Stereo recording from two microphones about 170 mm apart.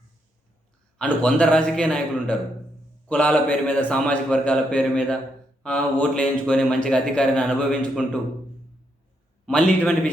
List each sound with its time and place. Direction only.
0.9 s a man's voice: 5° left (ahead or behind)
9.5 s a man's voice: 5° left (ahead or behind)